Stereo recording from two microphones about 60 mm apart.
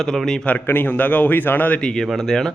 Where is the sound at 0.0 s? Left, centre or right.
Centre.